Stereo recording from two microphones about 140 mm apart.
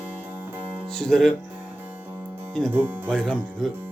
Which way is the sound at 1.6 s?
10° right (ahead or behind).